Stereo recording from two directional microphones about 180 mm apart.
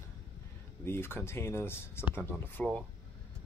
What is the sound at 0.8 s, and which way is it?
Speech, 10° left (ahead or behind).